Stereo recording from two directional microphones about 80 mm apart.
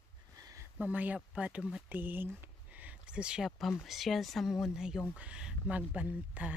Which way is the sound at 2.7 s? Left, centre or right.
Centre.